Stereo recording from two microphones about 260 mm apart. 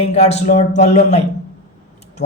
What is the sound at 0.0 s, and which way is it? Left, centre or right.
Speech, left.